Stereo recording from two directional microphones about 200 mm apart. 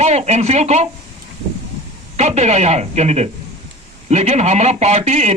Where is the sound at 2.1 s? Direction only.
35° right (ahead or behind).